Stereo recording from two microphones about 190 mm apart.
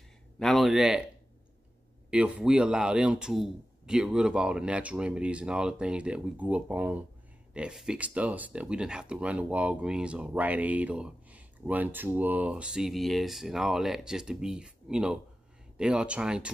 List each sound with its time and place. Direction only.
0.4 s speech: centre (ahead or behind)